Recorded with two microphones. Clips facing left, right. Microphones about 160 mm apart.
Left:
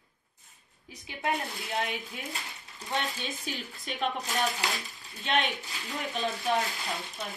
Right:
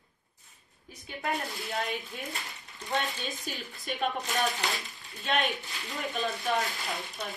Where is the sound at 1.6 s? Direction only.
Centre (ahead or behind).